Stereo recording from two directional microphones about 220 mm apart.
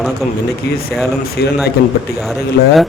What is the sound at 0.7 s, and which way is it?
Speech, 50° left (ahead or behind).